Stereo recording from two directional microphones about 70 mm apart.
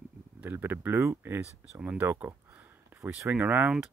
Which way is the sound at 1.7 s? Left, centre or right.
Centre.